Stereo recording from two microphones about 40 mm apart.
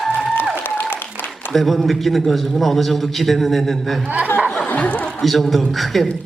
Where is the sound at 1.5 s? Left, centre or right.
Centre.